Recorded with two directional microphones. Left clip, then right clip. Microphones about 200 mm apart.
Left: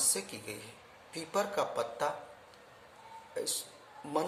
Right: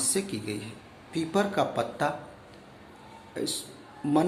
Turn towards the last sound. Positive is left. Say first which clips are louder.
# right 8 dB
turn(degrees=10)  # may be behind; listen again after turning